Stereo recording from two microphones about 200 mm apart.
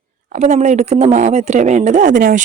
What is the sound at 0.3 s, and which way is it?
Speech, 35° right (ahead or behind).